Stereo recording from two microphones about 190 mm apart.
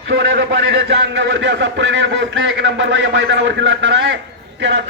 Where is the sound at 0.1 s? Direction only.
70° right (ahead or behind).